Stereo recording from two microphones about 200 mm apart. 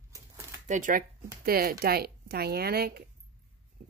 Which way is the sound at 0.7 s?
40° right (ahead or behind).